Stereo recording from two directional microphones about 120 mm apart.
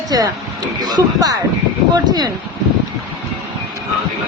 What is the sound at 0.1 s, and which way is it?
A man's voice, 30° right (ahead or behind).